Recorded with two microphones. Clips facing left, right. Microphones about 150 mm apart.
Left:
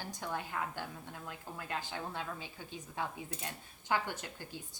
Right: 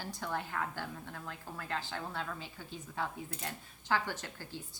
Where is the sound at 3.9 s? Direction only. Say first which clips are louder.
Right 1 dB; 15° left (ahead or behind).